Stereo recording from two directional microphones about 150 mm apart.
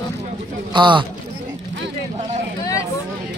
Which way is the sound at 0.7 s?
30° right (ahead or behind).